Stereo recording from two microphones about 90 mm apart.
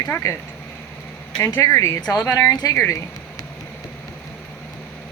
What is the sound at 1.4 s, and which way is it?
Speech, 35° left (ahead or behind).